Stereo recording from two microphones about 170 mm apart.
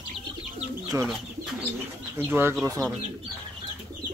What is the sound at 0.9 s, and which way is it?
Speech, 15° right (ahead or behind).